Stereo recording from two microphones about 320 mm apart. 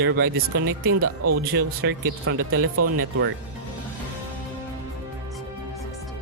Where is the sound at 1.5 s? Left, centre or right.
Right.